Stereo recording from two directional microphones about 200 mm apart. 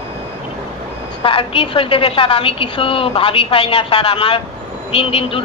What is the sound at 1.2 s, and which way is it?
Speech, 25° left (ahead or behind).